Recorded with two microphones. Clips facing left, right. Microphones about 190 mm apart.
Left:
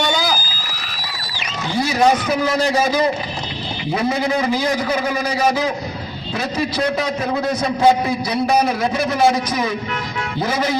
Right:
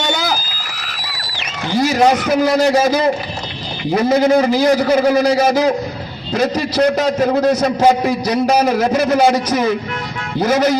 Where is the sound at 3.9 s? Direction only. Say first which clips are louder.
Right 7 dB; 40° right (ahead or behind).